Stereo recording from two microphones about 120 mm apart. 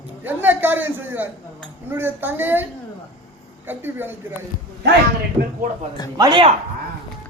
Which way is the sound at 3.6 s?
15° right (ahead or behind).